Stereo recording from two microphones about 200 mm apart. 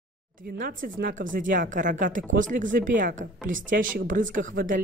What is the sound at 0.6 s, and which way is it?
Speech, 45° right (ahead or behind).